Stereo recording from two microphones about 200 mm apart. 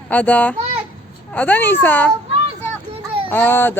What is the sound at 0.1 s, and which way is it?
A child's voice, 10° left (ahead or behind).